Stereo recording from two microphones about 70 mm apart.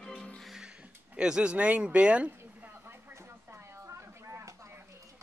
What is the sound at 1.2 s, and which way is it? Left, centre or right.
Speech, centre.